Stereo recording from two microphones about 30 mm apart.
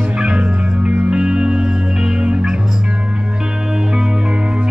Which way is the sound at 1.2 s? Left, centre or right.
Right.